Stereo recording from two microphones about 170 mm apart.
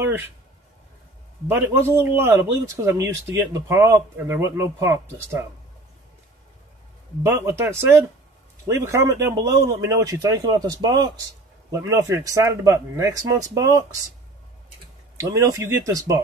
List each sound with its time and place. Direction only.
0.0 s a sound: 10° right (ahead or behind)
1.5 s a man's voice: 15° right (ahead or behind)
7.2 s a man's voice: 15° right (ahead or behind)
15.1 s a man's voice: 15° right (ahead or behind)